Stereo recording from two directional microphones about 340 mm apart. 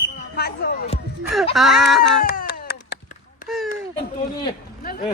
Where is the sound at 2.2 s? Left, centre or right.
Left.